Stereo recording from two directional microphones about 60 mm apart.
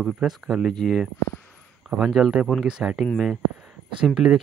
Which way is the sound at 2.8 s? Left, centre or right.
Centre.